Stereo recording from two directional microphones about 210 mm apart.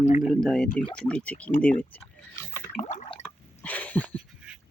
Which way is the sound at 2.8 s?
35° left (ahead or behind).